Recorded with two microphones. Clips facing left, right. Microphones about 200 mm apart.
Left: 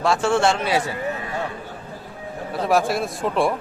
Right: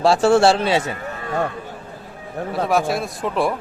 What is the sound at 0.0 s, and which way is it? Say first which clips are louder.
Speech: right 5 dB; 35° right (ahead or behind).